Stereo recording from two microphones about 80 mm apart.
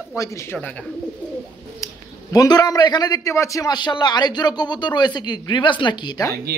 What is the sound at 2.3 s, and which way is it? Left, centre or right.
Speech, left.